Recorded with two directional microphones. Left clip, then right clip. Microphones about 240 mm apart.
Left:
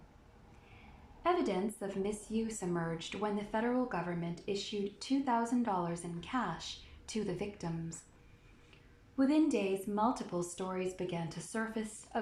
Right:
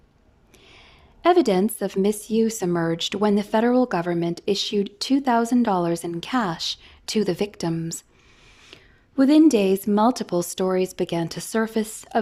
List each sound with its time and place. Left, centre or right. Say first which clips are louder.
1.2 s a woman's voice: right 15 dB; right
9.1 s speech: right 15 dB; right